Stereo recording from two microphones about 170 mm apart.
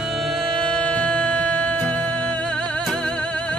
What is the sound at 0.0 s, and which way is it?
Music, centre (ahead or behind).